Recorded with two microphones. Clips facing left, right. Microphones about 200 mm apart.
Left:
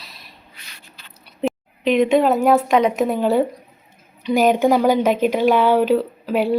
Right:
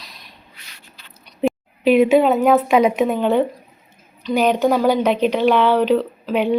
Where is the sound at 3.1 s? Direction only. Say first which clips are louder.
Even; 5° left (ahead or behind).